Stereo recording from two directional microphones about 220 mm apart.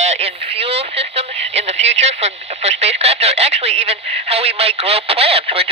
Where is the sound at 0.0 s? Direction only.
30° right (ahead or behind).